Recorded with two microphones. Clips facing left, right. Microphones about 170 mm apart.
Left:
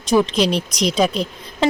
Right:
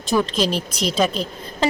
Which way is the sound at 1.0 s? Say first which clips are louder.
Left 1 dB; 10° left (ahead or behind).